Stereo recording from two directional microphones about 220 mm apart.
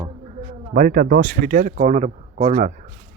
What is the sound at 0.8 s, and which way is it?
Speech, 40° right (ahead or behind).